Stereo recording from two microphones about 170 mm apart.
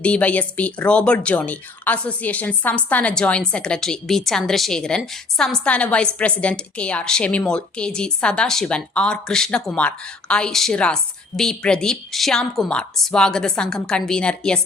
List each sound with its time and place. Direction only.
0.0 s speech: 10° left (ahead or behind)